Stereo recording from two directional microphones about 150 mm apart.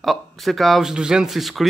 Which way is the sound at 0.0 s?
Centre (ahead or behind).